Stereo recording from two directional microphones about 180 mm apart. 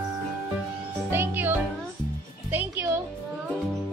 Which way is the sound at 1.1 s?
10° right (ahead or behind).